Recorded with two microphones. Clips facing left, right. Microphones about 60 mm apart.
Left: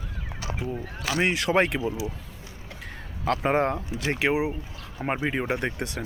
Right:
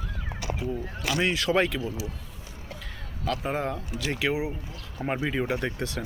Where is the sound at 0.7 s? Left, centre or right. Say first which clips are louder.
Left 3 dB; left.